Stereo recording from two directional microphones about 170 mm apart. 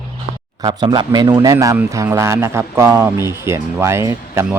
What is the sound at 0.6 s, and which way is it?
A man's voice, 25° right (ahead or behind).